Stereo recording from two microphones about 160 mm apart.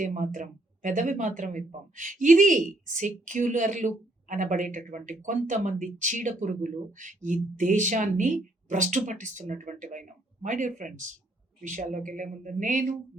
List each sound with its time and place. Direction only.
0.0 s speech: 50° right (ahead or behind)